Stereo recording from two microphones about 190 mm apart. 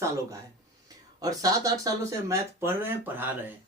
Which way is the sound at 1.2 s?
20° right (ahead or behind).